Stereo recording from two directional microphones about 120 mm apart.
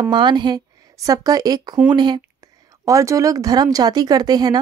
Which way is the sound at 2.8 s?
25° right (ahead or behind).